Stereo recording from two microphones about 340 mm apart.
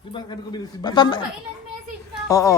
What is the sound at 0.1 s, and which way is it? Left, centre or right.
A man's voice, centre.